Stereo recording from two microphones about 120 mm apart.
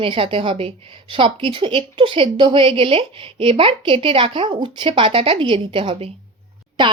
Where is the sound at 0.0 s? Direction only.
50° right (ahead or behind).